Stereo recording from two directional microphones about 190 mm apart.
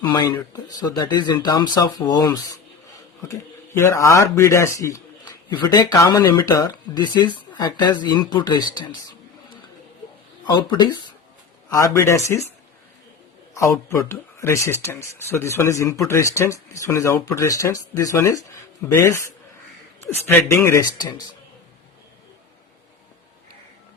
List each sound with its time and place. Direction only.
0.1 s speech: 20° left (ahead or behind)
3.8 s speech: 15° left (ahead or behind)
10.4 s speech: 25° left (ahead or behind)
13.5 s speech: 15° left (ahead or behind)